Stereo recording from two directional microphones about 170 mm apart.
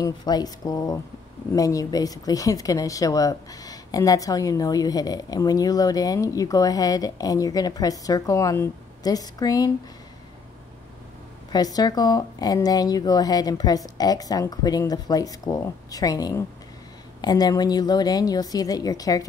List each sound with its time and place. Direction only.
0.0 s speech: 25° left (ahead or behind)
11.5 s speech: 20° left (ahead or behind)